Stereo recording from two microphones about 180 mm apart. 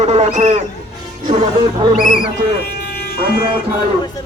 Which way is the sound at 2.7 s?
60° left (ahead or behind).